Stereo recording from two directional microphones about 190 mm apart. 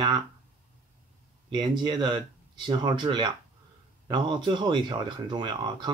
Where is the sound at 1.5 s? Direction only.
20° right (ahead or behind).